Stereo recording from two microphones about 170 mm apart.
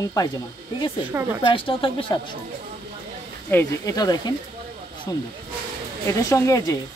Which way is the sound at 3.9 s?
20° left (ahead or behind).